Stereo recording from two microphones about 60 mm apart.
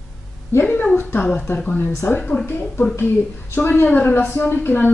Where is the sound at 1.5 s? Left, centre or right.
Left.